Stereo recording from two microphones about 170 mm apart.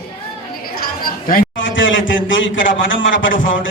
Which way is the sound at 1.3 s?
75° left (ahead or behind).